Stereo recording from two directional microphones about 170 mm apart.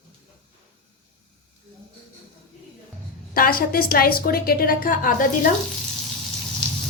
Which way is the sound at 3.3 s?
60° left (ahead or behind).